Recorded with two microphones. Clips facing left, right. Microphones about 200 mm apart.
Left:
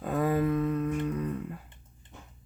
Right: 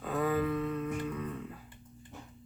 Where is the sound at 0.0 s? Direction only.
45° left (ahead or behind).